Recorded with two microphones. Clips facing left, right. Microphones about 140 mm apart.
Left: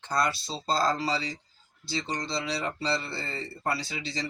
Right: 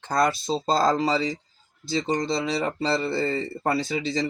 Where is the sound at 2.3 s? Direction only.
50° right (ahead or behind).